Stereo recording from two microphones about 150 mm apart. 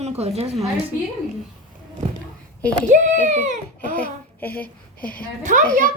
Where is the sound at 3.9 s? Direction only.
10° left (ahead or behind).